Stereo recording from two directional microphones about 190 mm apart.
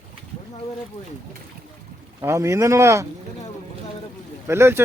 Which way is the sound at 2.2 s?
15° right (ahead or behind).